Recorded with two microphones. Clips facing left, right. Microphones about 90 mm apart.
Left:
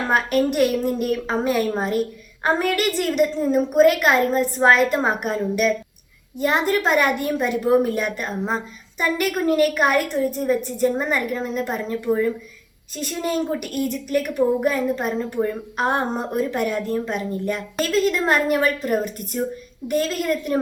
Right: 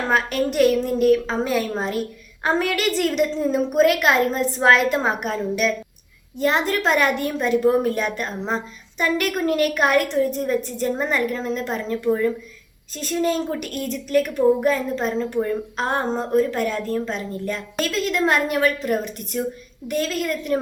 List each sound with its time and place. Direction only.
0.1 s a woman's voice: 5° left (ahead or behind)